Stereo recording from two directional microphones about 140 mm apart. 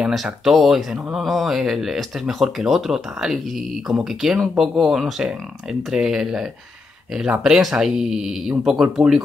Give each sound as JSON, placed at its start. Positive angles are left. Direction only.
{"t": 0.0, "sound": "speech", "side_deg": 0}